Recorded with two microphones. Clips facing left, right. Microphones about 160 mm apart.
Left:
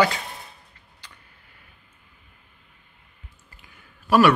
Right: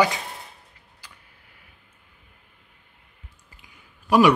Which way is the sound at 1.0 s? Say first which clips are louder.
Even; 10° right (ahead or behind).